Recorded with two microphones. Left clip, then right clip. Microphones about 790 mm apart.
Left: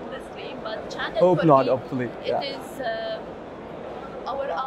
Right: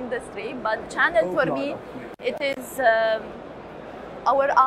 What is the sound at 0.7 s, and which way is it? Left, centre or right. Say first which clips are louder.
A woman's voice: right 9 dB; right.